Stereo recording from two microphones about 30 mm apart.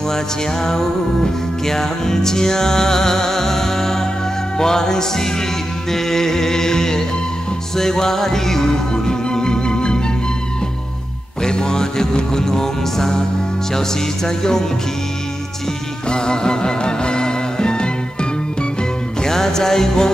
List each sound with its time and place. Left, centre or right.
1.7 s music: centre
4.6 s speech: centre
5.9 s music: centre
8.9 s music: left
11.4 s music: left
13.7 s speech: centre
16.1 s music: left
19.2 s music: centre